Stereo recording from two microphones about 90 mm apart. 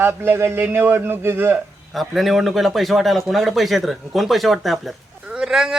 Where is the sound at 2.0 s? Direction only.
Centre (ahead or behind).